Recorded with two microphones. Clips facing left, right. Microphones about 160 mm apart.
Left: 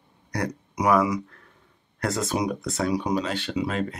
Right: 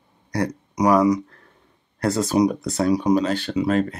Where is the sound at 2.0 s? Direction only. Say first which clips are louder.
Right 7 dB; 35° right (ahead or behind).